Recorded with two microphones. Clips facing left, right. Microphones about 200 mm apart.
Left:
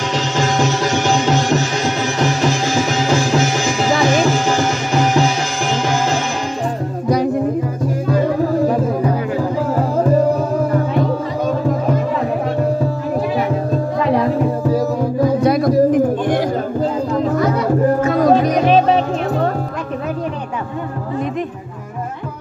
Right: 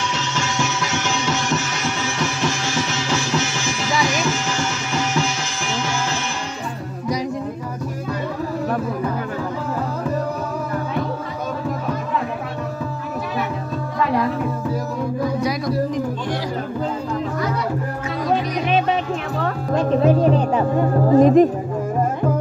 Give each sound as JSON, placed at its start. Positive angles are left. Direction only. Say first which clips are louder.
{"t": 0.4, "sound": "music", "louder": "left 8 dB", "side_deg": 35}
{"t": 3.1, "sound": "music", "louder": "left 7 dB", "side_deg": 40}
{"t": 15.4, "sound": "music", "louder": "left 8 dB", "side_deg": 55}
{"t": 18.0, "sound": "music", "louder": "left 9 dB", "side_deg": 50}
{"t": 21.1, "sound": "music", "louder": "right 11 dB", "side_deg": -40}